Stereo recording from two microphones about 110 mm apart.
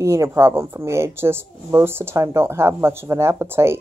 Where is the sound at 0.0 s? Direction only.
25° right (ahead or behind).